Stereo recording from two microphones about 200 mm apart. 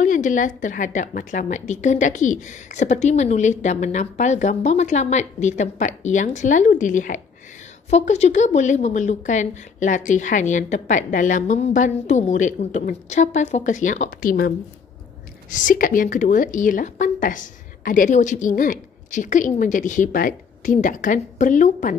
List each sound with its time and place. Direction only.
0.0 s a woman's voice: 40° left (ahead or behind)
15.5 s a woman's voice: 40° left (ahead or behind)